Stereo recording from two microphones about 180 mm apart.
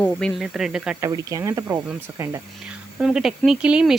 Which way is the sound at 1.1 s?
20° right (ahead or behind).